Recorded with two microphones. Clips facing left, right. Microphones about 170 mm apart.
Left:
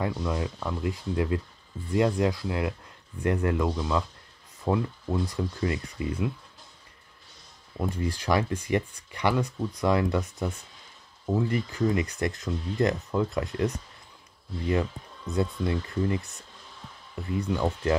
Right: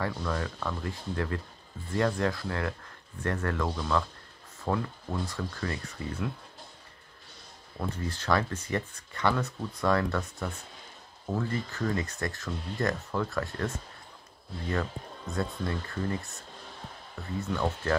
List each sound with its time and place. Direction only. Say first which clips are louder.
0.0 s speech: left 3 dB; 15° left (ahead or behind)
7.9 s speech: left 2 dB; 15° left (ahead or behind)
15.3 s speech: left 5 dB; 20° left (ahead or behind)
16.2 s a sound: even; 60° right (ahead or behind)
17.4 s speech: left 3 dB; 15° left (ahead or behind)